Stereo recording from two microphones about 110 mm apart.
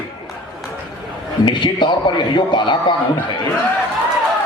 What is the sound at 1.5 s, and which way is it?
Speech, 45° left (ahead or behind).